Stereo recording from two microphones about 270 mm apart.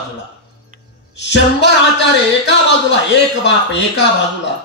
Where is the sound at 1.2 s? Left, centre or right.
Left.